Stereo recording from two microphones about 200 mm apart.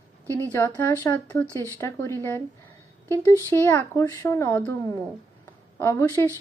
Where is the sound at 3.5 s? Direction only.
10° left (ahead or behind).